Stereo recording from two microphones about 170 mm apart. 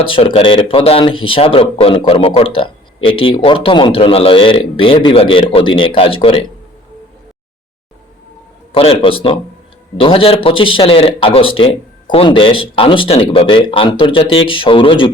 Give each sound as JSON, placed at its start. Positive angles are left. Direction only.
{"t": 0.0, "sound": "speech", "side_deg": 30}
{"t": 8.7, "sound": "speech", "side_deg": 35}